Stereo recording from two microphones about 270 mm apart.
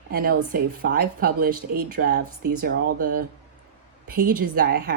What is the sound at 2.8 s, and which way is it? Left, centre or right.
Speech, right.